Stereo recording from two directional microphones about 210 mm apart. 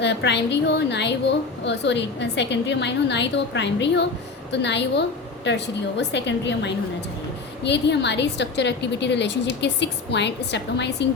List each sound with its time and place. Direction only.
0.0 s a woman's voice: 55° left (ahead or behind)